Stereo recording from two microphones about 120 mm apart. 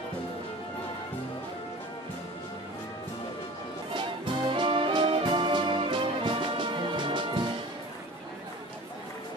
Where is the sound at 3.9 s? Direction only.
45° right (ahead or behind).